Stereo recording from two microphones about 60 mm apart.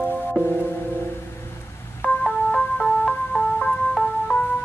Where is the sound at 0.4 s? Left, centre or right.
Right.